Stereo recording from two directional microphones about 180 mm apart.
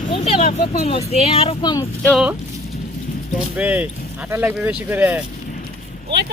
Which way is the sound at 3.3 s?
5° right (ahead or behind).